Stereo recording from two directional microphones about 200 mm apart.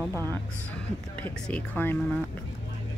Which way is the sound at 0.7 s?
5° left (ahead or behind).